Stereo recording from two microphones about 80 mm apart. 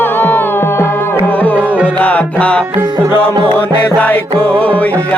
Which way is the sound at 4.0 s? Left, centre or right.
Centre.